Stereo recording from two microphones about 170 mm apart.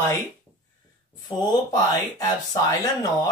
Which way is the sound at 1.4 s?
20° left (ahead or behind).